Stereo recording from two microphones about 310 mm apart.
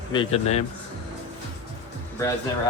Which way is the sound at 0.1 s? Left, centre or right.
Centre.